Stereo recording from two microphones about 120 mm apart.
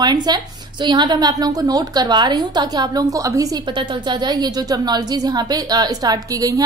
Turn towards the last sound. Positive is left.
turn(degrees=-30)  # may be behind; listen again after turning